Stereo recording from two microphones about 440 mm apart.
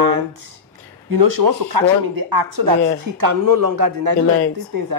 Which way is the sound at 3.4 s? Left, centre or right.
Right.